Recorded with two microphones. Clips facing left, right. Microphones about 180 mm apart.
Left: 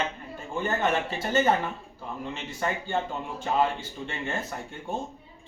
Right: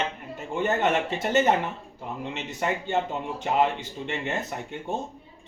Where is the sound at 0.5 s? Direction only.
20° right (ahead or behind).